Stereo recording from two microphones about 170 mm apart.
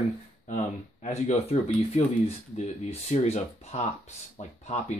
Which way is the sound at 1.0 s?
40° left (ahead or behind).